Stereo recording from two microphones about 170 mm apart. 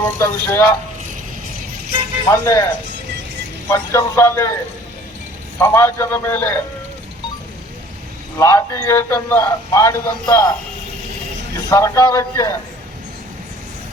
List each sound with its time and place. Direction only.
0.2 s a man's voice: 15° left (ahead or behind)
2.2 s a man's voice: 15° left (ahead or behind)
3.7 s a man's voice: 15° left (ahead or behind)
5.5 s a man's voice: 15° left (ahead or behind)
8.4 s a man's voice: 15° left (ahead or behind)
11.7 s a man's voice: 20° left (ahead or behind)